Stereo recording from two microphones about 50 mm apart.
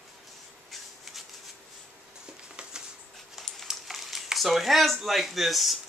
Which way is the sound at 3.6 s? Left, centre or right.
Centre.